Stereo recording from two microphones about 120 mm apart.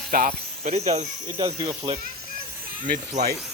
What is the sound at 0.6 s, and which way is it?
Speech, 70° right (ahead or behind).